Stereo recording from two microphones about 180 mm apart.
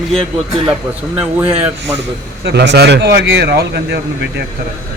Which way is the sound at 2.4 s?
70° right (ahead or behind).